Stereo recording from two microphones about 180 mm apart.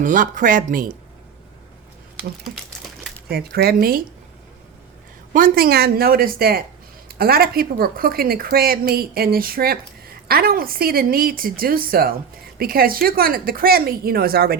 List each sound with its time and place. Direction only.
0.0 s speech: 45° right (ahead or behind)
2.1 s a sound: centre (ahead or behind)
3.2 s speech: 60° right (ahead or behind)
5.3 s speech: 55° right (ahead or behind)